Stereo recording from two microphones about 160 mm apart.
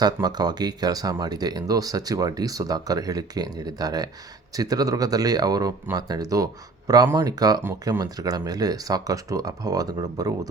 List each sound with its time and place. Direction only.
0.0 s speech: 25° right (ahead or behind)